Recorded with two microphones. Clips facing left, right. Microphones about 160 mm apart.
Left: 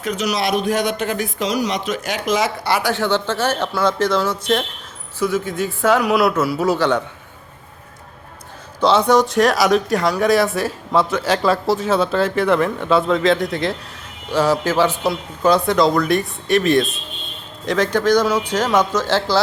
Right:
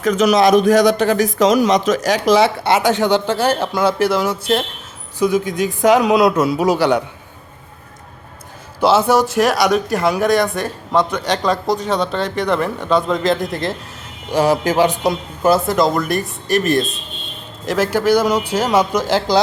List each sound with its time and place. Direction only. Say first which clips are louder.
0.1 s a man's voice: right 8 dB; 50° right (ahead or behind); by 7.0 s 10° right (ahead or behind)
8.8 s speech: right 1 dB; 5° right (ahead or behind)
14.3 s a man's voice: right 2 dB; 15° right (ahead or behind)